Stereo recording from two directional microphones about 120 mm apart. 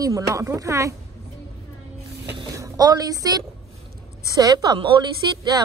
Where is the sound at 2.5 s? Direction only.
30° right (ahead or behind).